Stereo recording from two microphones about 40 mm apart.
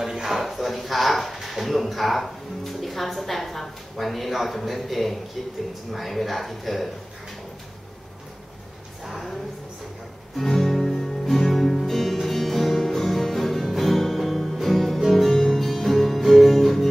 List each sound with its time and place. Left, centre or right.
0.0 s speech: centre
9.0 s speech: centre
10.3 s music: centre
15.3 s music: centre